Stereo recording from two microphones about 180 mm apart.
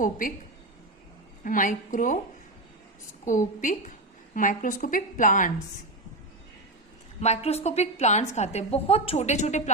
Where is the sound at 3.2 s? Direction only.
45° left (ahead or behind).